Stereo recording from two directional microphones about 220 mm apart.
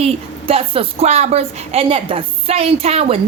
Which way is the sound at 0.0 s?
25° right (ahead or behind).